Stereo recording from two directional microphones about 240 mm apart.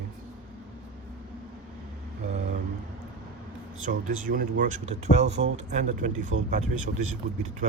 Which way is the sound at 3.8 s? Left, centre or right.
Right.